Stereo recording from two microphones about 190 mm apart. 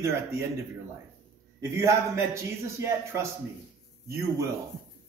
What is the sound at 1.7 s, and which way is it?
Speech, 15° right (ahead or behind).